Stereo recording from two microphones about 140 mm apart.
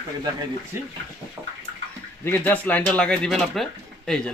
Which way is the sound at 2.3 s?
10° left (ahead or behind).